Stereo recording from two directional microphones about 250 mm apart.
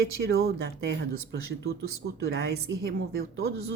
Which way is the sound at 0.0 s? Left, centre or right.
Right.